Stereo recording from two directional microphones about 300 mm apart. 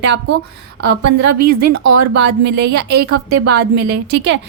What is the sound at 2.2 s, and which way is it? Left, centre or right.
A woman's voice, right.